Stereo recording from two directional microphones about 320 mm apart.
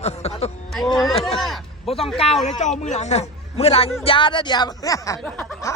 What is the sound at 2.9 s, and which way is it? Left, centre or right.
A man's voice, left.